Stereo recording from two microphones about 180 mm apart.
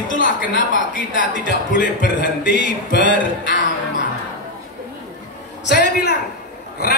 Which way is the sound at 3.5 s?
90° left.